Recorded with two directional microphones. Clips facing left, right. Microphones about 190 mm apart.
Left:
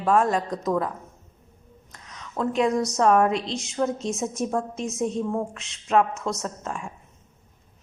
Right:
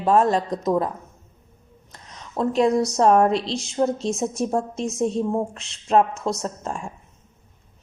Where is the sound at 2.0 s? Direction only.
35° right (ahead or behind).